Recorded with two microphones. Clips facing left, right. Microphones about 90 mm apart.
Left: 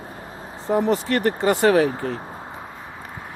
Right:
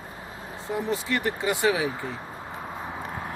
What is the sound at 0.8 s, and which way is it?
Speech, 60° left (ahead or behind).